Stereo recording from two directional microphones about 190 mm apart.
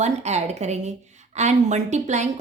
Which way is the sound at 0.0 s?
35° right (ahead or behind).